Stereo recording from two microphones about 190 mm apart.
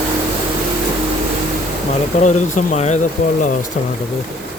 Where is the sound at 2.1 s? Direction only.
35° left (ahead or behind).